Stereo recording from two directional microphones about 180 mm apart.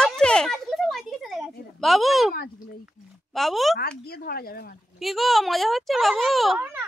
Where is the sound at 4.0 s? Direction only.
60° left (ahead or behind).